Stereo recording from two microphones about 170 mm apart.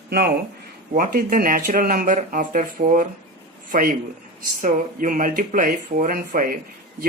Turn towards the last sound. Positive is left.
turn(degrees=-60)  # may be behind; listen again after turning